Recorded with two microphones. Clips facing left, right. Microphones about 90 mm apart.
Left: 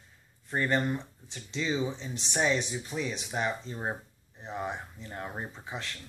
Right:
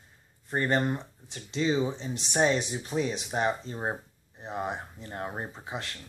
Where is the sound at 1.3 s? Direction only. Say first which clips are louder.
Right 4 dB; 45° right (ahead or behind).